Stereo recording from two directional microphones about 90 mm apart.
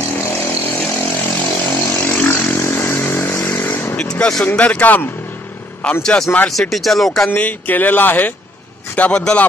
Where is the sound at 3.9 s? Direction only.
10° left (ahead or behind).